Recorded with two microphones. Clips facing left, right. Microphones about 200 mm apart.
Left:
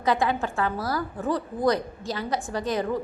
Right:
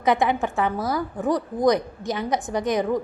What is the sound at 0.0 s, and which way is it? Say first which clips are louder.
A woman's voice: right 3 dB; 20° right (ahead or behind).